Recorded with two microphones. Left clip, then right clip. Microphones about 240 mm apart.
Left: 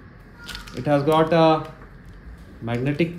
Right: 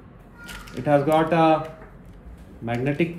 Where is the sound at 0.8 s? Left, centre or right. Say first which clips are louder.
Even; left.